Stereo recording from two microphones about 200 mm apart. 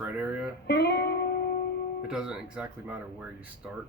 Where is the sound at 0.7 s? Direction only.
55° left (ahead or behind).